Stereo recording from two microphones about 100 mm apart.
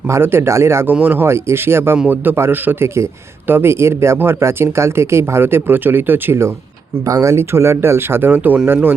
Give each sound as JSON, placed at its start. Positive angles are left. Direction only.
{"t": 0.1, "sound": "a man's voice", "side_deg": -25}